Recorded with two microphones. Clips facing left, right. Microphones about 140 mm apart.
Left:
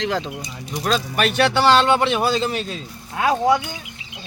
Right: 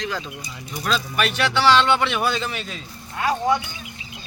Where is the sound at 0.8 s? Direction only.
40° left (ahead or behind).